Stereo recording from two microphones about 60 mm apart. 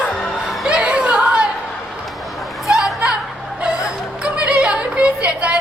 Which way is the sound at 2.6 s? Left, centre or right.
Centre.